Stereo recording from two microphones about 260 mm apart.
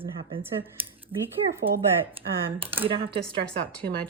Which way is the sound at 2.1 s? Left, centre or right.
Right.